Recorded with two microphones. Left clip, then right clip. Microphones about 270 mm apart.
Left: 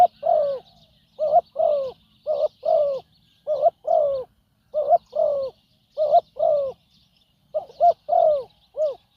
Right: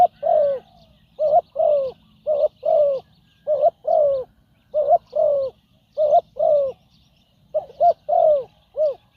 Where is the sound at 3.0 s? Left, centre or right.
Centre.